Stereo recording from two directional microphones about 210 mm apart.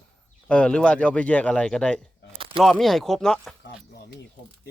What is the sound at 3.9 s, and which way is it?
Speech, 50° left (ahead or behind).